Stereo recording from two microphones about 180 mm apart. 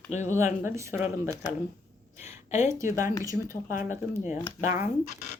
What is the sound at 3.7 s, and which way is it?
Speech, 45° left (ahead or behind).